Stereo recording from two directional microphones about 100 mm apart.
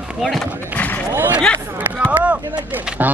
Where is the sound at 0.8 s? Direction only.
15° left (ahead or behind).